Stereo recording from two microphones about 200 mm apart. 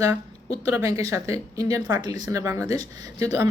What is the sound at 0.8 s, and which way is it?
Speech, 15° right (ahead or behind).